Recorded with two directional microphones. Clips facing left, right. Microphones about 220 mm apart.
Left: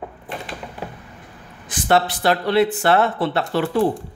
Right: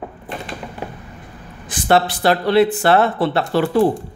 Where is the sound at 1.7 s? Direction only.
30° right (ahead or behind).